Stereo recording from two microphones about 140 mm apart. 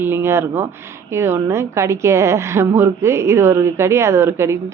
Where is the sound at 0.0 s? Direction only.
15° right (ahead or behind).